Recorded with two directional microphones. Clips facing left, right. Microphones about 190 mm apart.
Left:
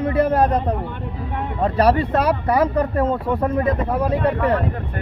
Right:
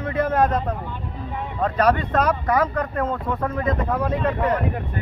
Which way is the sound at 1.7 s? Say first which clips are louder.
Left 2 dB; 30° left (ahead or behind).